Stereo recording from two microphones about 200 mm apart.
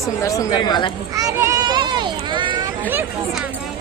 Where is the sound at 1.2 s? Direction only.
15° right (ahead or behind).